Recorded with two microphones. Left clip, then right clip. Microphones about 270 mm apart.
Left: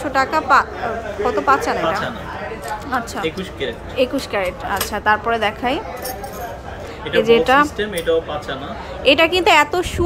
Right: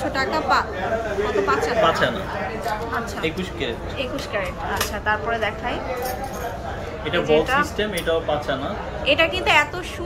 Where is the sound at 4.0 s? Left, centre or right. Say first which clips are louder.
Left 8 dB; left.